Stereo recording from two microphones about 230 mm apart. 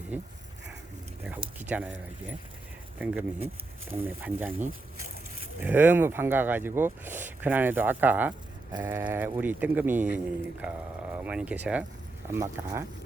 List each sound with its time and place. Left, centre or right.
0.1 s speech: centre
1.7 s speech: centre